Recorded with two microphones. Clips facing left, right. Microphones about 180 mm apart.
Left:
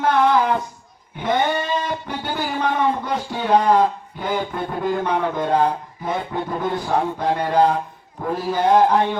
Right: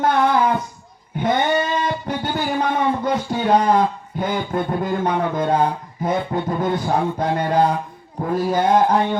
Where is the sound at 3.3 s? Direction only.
45° right (ahead or behind).